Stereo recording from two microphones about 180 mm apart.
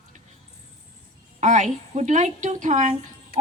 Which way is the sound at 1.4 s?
40° right (ahead or behind).